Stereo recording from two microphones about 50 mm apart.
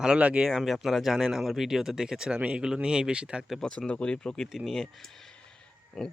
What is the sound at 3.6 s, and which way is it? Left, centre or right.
Speech, left.